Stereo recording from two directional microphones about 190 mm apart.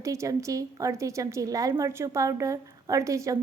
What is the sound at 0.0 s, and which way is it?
A woman's voice, 15° right (ahead or behind).